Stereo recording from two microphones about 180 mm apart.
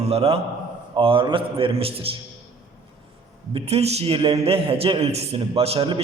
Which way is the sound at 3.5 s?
35° right (ahead or behind).